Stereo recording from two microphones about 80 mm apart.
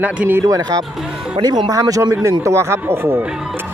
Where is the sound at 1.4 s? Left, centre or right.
Right.